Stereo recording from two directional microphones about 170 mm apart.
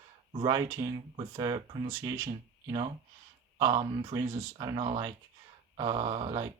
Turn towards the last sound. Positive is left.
turn(degrees=-30)  # may be behind; listen again after turning